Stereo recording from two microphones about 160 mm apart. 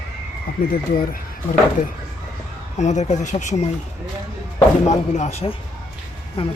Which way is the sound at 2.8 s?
45° left (ahead or behind).